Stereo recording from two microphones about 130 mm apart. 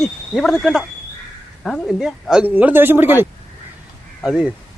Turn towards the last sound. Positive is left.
turn(degrees=-5)  # may be behind; listen again after turning